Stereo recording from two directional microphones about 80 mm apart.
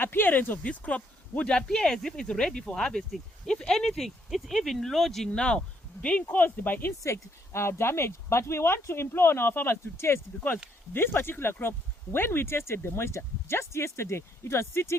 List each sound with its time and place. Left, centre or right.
0.0 s speech: left
7.0 s speech: left